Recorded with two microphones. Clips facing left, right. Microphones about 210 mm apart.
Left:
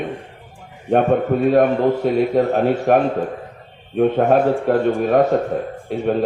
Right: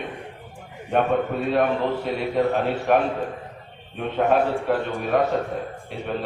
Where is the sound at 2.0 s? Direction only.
45° left (ahead or behind).